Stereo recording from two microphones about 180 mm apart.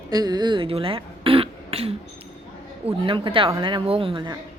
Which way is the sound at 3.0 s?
30° right (ahead or behind).